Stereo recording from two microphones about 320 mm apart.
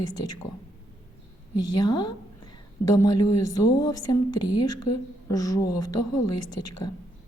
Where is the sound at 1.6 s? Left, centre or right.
Centre.